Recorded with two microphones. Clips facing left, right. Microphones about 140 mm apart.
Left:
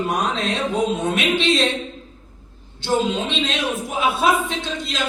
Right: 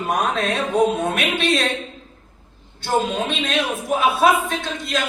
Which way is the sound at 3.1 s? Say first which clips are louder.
Even; 55° right (ahead or behind).